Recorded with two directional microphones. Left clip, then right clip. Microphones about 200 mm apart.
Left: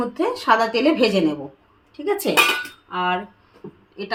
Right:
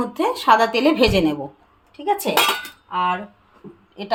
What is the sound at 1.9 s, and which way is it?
Speech, 5° right (ahead or behind).